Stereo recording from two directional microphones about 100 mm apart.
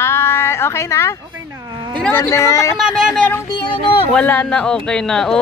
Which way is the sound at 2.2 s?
30° left (ahead or behind).